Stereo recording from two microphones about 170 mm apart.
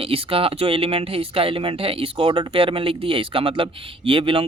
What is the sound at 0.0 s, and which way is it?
Speech, 30° right (ahead or behind).